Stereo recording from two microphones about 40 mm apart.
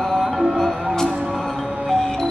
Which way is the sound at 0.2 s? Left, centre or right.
Centre.